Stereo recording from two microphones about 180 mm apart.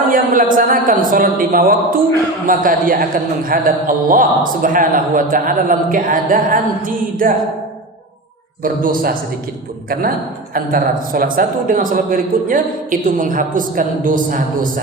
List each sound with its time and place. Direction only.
0.1 s speech: 50° right (ahead or behind)
8.6 s speech: 50° right (ahead or behind)
10.5 s speech: 50° right (ahead or behind)